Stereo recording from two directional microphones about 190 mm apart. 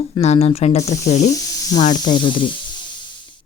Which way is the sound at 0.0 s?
35° left (ahead or behind).